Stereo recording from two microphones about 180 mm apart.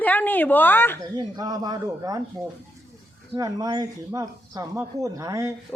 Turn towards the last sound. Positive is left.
turn(degrees=-15)  # may be behind; listen again after turning